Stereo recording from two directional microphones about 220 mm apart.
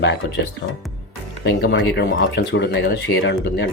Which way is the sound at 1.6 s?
50° left (ahead or behind).